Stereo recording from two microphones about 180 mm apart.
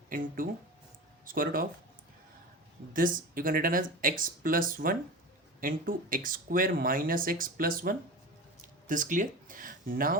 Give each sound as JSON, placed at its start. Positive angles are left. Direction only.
{"t": 1.2, "sound": "speech", "side_deg": -50}
{"t": 2.9, "sound": "speech", "side_deg": -50}